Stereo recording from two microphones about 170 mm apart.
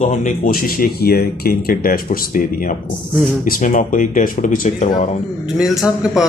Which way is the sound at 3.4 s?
50° left (ahead or behind).